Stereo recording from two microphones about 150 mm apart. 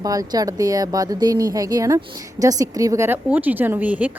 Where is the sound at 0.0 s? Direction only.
25° right (ahead or behind).